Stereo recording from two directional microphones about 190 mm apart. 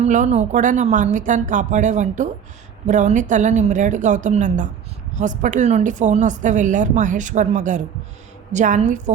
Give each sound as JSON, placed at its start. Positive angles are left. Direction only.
{"t": 0.0, "sound": "speech", "side_deg": -40}